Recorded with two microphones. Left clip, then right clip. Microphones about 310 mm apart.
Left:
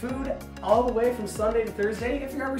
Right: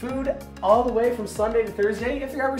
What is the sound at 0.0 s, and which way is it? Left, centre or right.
Speech, centre.